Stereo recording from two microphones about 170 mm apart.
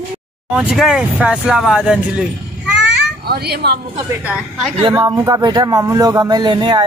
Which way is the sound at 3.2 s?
65° right (ahead or behind).